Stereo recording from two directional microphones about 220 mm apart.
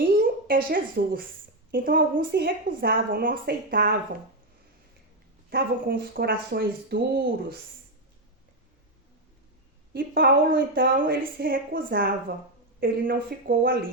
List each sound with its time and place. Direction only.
0.0 s a sound: 40° right (ahead or behind)
1.7 s a woman's voice: 40° right (ahead or behind)
5.5 s speech: 40° right (ahead or behind)
9.9 s a woman's voice: 40° right (ahead or behind)